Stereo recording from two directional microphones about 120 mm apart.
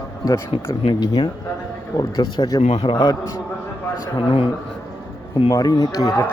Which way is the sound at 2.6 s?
60° left (ahead or behind).